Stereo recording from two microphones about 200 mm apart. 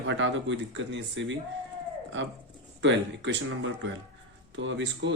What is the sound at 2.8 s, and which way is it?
Speech, 65° right (ahead or behind).